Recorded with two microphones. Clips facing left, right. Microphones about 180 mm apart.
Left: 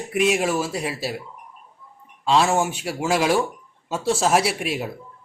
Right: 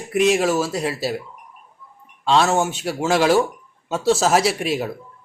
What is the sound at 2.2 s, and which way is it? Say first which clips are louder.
A man's voice: right 1 dB; 5° left (ahead or behind).